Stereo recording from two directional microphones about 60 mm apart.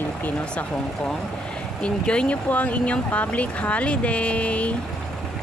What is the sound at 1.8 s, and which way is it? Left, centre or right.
Speech, centre.